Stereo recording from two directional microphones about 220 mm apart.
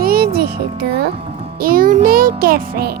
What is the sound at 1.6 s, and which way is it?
Music, 40° right (ahead or behind).